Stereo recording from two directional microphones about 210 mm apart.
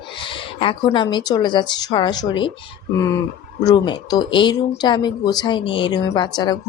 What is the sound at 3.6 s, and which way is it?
Speech, 20° left (ahead or behind).